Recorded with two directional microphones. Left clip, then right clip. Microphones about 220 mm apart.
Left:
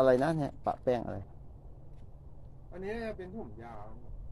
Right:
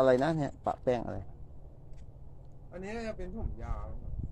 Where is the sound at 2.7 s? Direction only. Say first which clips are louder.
Left 1 dB; 45° right (ahead or behind).